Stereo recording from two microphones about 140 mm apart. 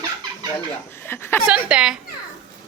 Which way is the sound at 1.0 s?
15° left (ahead or behind).